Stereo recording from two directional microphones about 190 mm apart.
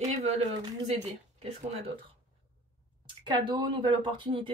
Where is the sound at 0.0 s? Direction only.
35° right (ahead or behind).